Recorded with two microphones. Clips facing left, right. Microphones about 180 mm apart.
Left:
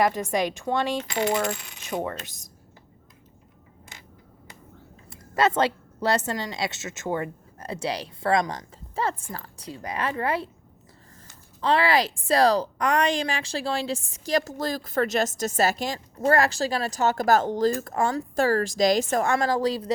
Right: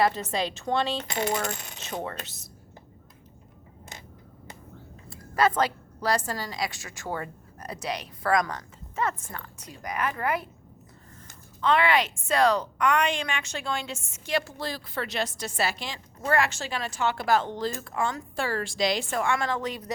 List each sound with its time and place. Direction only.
0.0 s coin: 15° left (ahead or behind)
5.0 s a woman's voice: 20° left (ahead or behind)
11.6 s a woman's voice: 35° left (ahead or behind)